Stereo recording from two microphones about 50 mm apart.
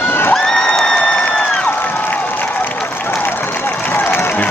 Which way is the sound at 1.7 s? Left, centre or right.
Left.